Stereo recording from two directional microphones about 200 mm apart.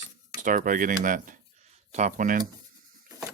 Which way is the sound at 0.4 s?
40° right (ahead or behind).